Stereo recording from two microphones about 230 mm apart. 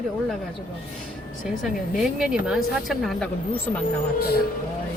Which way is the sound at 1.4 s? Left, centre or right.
Centre.